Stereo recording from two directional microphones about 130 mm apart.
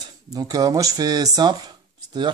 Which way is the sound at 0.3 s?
30° right (ahead or behind).